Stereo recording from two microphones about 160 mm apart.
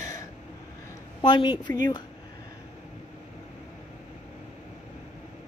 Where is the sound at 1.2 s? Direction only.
25° left (ahead or behind).